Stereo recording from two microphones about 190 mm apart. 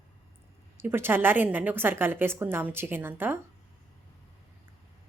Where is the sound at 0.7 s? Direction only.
10° right (ahead or behind).